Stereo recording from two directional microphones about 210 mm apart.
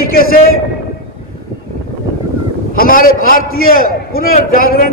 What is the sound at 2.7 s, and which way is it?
A man's voice, 40° left (ahead or behind).